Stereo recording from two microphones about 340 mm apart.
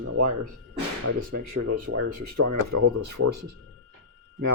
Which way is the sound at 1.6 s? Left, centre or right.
Right.